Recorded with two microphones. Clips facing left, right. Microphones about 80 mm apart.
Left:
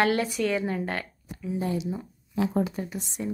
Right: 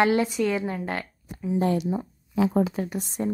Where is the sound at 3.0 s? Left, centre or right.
Right.